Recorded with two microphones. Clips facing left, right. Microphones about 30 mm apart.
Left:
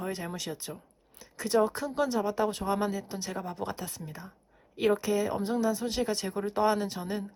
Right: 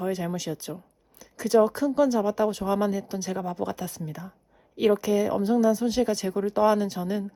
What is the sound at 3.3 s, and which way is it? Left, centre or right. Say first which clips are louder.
Speech: right 6 dB; right.